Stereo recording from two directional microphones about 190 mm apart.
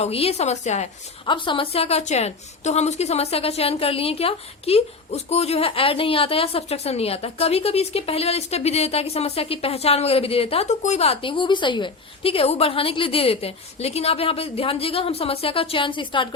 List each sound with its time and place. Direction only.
0.0 s a woman's voice: 30° left (ahead or behind)